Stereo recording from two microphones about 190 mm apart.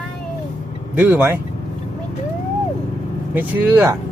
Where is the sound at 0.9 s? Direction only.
10° right (ahead or behind).